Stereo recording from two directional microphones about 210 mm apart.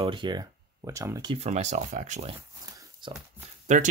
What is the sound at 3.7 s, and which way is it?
Speech, 35° right (ahead or behind).